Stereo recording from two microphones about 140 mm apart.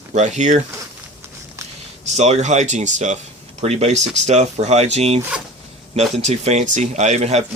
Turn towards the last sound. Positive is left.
turn(degrees=-50)  # may be behind; listen again after turning